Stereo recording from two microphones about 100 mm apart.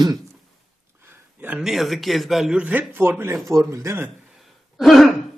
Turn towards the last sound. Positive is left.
turn(degrees=0)  # may be behind; listen again after turning